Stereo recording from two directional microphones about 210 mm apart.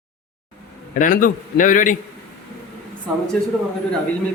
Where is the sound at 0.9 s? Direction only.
40° left (ahead or behind).